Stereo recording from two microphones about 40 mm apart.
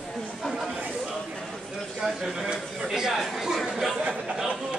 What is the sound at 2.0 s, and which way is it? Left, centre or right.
A man's voice, centre.